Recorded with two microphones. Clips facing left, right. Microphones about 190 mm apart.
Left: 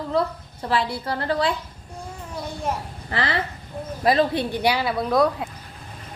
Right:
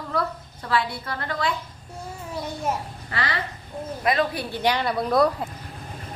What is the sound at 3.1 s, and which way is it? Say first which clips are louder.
A woman's voice: left 4 dB; 30° left (ahead or behind).